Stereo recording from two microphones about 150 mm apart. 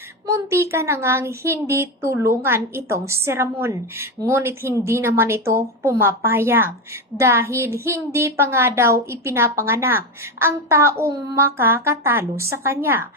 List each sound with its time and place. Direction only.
0.3 s a woman's voice: 20° right (ahead or behind)